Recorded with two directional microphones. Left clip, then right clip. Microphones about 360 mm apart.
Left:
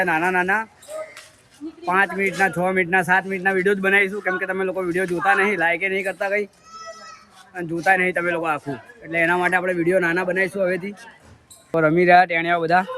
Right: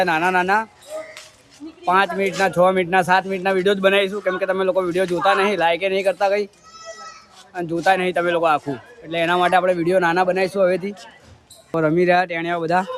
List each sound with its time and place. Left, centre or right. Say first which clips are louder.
0.0 s speech: right 2 dB; centre
1.8 s speech: right 2 dB; centre
7.5 s speech: right 1 dB; centre